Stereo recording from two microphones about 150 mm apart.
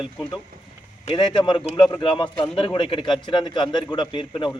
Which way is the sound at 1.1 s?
30° left (ahead or behind).